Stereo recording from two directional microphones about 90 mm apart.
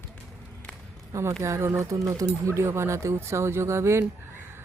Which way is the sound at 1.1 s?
30° right (ahead or behind).